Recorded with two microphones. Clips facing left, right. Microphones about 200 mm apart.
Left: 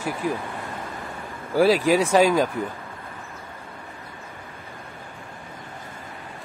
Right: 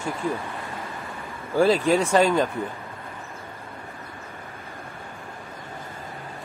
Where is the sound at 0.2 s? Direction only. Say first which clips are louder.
Left 1 dB; 10° left (ahead or behind).